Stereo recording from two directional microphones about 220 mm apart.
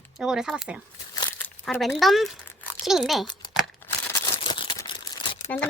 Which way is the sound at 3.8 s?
15° left (ahead or behind).